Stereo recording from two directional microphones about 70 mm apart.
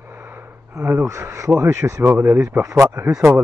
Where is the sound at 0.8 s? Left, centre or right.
Right.